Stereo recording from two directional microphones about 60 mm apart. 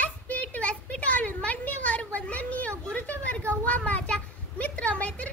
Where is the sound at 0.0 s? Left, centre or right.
Left.